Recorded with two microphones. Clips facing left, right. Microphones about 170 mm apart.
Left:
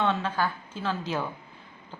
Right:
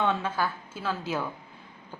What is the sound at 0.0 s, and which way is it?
A woman's voice, 10° right (ahead or behind).